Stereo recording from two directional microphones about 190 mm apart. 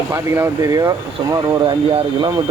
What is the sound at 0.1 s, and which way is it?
Speech, 15° right (ahead or behind).